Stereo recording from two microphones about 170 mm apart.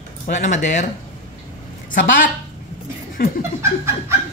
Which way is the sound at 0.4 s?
45° left (ahead or behind).